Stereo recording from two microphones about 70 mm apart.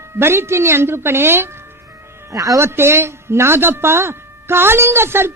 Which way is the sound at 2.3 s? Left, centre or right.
Right.